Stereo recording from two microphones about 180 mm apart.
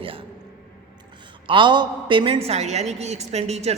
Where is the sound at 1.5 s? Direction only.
25° right (ahead or behind).